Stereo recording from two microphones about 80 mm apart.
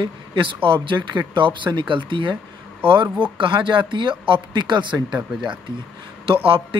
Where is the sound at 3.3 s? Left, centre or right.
Right.